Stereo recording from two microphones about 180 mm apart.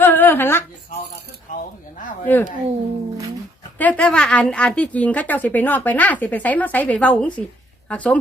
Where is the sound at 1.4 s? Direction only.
45° left (ahead or behind).